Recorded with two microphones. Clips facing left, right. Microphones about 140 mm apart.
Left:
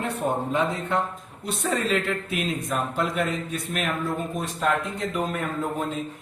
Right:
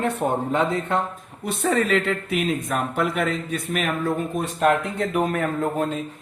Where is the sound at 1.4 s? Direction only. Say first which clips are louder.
Right 4 dB; 55° right (ahead or behind).